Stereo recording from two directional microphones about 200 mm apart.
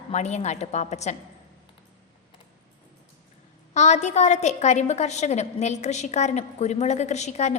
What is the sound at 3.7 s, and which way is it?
A woman's voice, 35° left (ahead or behind).